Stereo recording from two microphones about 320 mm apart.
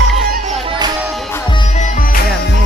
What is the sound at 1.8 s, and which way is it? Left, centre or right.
Music, left.